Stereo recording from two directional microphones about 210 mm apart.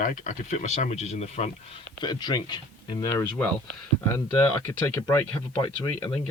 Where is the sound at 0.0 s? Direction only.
35° left (ahead or behind).